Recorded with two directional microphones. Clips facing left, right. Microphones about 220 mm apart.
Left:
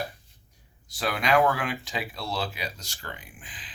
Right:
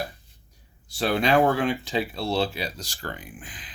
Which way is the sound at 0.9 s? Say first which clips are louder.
Right 4 dB; 30° right (ahead or behind).